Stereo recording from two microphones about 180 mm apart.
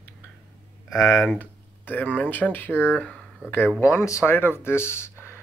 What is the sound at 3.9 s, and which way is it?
Speech, 15° left (ahead or behind).